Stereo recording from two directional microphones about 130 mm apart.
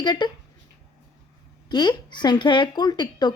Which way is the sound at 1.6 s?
35° left (ahead or behind).